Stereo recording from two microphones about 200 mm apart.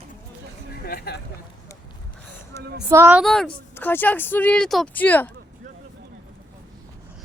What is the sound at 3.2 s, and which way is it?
Speech, 5° left (ahead or behind).